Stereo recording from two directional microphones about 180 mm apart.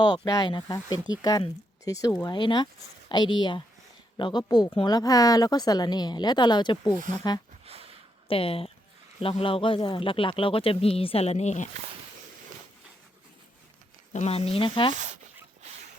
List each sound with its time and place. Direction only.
0.0 s speech: 20° left (ahead or behind)
7.6 s a sound: 35° right (ahead or behind)
8.3 s speech: 30° left (ahead or behind)
14.1 s speech: 35° left (ahead or behind)